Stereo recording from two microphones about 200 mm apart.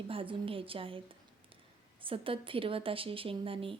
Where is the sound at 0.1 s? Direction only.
25° right (ahead or behind).